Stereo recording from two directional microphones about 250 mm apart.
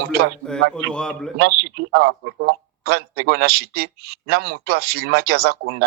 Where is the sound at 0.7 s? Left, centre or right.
Centre.